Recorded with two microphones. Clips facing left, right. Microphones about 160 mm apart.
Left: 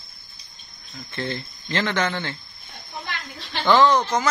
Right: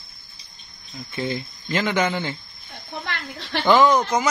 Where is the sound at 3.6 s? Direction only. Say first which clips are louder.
Right 1 dB; 10° right (ahead or behind).